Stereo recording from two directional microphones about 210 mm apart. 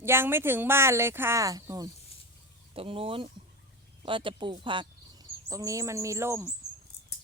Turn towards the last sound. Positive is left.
turn(degrees=-10)  # may be behind; listen again after turning